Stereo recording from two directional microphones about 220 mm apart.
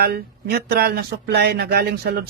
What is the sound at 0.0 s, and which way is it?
Speech, 45° right (ahead or behind).